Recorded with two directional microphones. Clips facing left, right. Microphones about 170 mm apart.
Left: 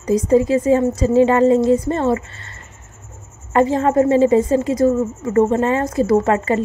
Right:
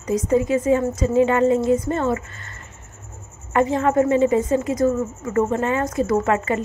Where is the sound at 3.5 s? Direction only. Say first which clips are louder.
Left 3 dB; 30° left (ahead or behind).